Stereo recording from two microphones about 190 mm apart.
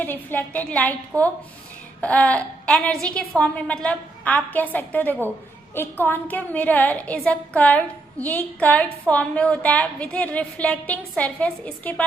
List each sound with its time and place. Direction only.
0.0 s a woman's voice: 10° left (ahead or behind)